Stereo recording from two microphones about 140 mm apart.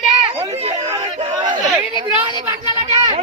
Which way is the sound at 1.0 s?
35° right (ahead or behind).